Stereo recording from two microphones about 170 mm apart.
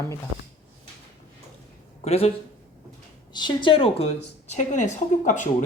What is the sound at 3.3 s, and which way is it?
A woman's voice, 25° left (ahead or behind).